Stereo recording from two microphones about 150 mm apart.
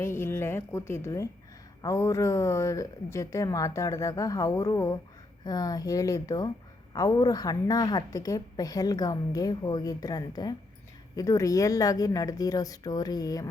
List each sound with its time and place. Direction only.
0.0 s a woman's voice: 15° left (ahead or behind)